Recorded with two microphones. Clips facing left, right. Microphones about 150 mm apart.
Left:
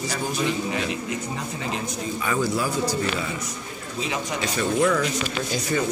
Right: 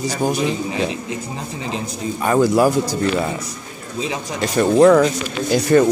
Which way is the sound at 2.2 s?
45° right (ahead or behind).